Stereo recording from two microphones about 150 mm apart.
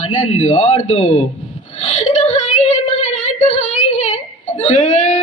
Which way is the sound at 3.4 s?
50° left (ahead or behind).